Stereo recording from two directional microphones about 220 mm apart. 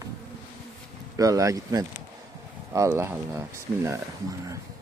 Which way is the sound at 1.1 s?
15° right (ahead or behind).